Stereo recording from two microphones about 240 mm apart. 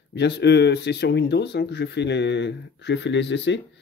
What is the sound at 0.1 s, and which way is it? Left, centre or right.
Speech, left.